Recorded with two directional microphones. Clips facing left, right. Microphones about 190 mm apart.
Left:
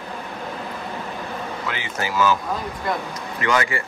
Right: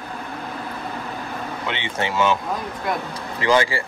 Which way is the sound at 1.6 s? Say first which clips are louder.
Right 4 dB; 25° right (ahead or behind).